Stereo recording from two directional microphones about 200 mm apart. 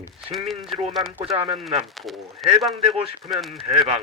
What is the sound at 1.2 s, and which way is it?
Speech, 30° right (ahead or behind).